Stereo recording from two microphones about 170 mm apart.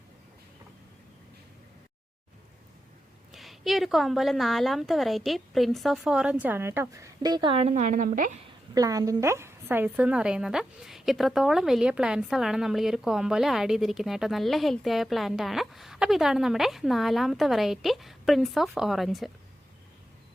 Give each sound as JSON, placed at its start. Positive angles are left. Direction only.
{"t": 3.3, "sound": "a woman's voice", "side_deg": 0}
{"t": 7.7, "sound": "a woman's voice", "side_deg": -50}
{"t": 8.7, "sound": "a woman's voice", "side_deg": -20}